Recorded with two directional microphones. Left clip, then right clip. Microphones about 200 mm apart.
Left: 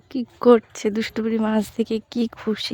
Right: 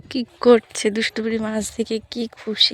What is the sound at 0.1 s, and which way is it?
Speech, 10° left (ahead or behind).